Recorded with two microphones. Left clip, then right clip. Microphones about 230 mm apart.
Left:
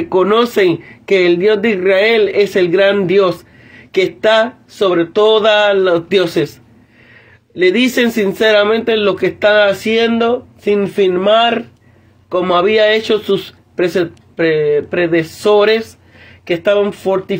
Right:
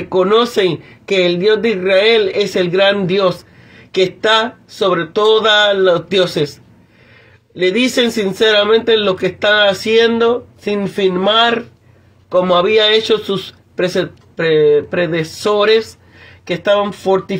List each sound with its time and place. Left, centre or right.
0.1 s a man's voice: left
7.5 s a man's voice: left